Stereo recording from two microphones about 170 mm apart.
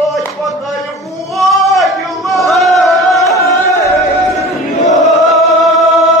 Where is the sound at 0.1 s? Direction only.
Centre (ahead or behind).